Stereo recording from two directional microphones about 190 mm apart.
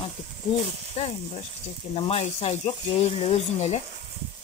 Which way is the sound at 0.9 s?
35° left (ahead or behind).